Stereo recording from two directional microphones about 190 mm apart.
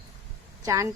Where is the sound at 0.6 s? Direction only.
20° right (ahead or behind).